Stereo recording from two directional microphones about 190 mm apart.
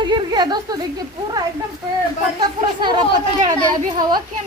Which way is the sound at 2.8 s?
25° right (ahead or behind).